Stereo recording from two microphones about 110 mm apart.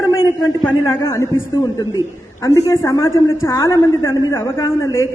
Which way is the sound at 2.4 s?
25° left (ahead or behind).